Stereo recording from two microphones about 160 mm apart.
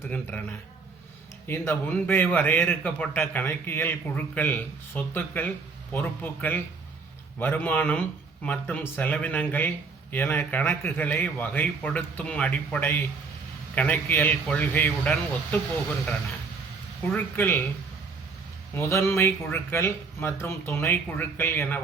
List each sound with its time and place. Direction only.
0.1 s speech: 10° left (ahead or behind)
1.5 s speech: 15° left (ahead or behind)
17.1 s speech: 15° left (ahead or behind)
18.7 s speech: 15° left (ahead or behind)